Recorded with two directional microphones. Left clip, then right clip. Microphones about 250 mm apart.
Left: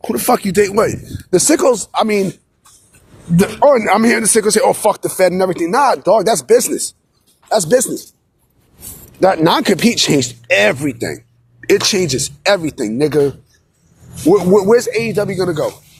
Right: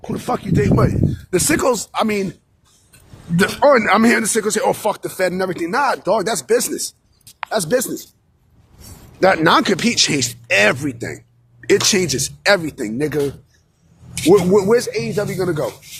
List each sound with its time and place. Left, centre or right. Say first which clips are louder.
0.0 s speech: left 8 dB; left
1.3 s speech: left 5 dB; centre
3.3 s speech: left 2 dB; centre
9.2 s speech: left 1 dB; centre
14.3 s speech: left 3 dB; centre